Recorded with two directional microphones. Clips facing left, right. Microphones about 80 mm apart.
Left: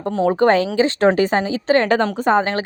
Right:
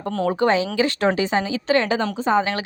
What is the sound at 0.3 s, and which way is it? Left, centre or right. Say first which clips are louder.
Speech: left 4 dB; left.